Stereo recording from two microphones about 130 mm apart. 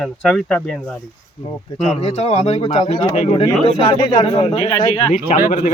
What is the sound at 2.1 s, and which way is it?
Speech, 55° left (ahead or behind).